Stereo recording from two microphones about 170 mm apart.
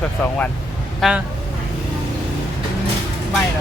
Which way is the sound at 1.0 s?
5° right (ahead or behind).